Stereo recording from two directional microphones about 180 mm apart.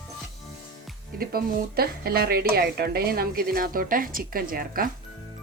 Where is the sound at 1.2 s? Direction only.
55° right (ahead or behind).